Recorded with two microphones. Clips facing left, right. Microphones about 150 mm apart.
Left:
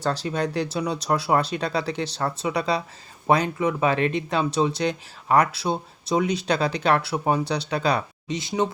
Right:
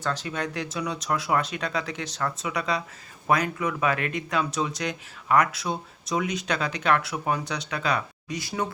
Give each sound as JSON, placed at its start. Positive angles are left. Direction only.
{"t": 0.0, "sound": "speech", "side_deg": 35}